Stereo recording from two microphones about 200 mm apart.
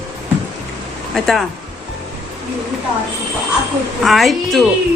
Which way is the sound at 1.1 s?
Centre (ahead or behind).